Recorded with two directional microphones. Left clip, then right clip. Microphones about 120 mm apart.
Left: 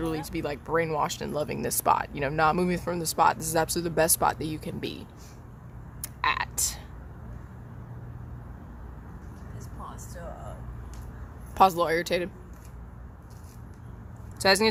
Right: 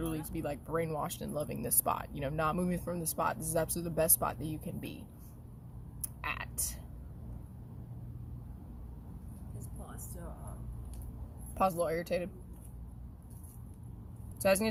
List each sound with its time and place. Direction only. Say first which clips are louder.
0.0 s speech: left 7 dB; 30° left (ahead or behind)
6.0 s whispering: left 12 dB; 35° left (ahead or behind)
11.5 s speech: left 10 dB; 50° left (ahead or behind)
14.3 s speech: left 7 dB; 30° left (ahead or behind)